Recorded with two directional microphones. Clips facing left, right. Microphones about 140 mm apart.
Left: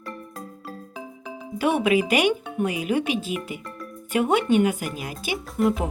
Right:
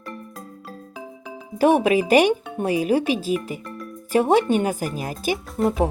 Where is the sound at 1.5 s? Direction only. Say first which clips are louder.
Right 4 dB; 40° right (ahead or behind).